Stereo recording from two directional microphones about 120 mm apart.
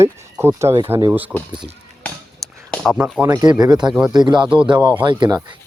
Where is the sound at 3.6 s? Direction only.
35° right (ahead or behind).